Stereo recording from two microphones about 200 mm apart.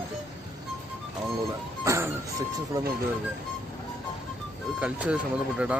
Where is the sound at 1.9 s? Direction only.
15° right (ahead or behind).